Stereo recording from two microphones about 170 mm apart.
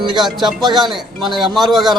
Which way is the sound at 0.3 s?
Centre (ahead or behind).